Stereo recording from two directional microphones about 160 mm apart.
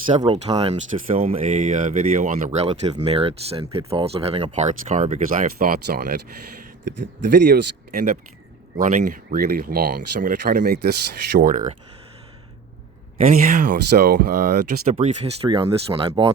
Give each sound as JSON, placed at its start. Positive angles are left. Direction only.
{"t": 0.1, "sound": "speech", "side_deg": -35}
{"t": 7.0, "sound": "speech", "side_deg": -90}
{"t": 8.7, "sound": "speech", "side_deg": -50}
{"t": 13.1, "sound": "speech", "side_deg": -60}
{"t": 14.9, "sound": "speech", "side_deg": -40}
{"t": 15.4, "sound": "speech", "side_deg": -30}